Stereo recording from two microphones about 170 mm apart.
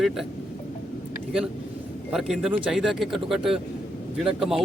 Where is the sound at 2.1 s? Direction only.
Centre (ahead or behind).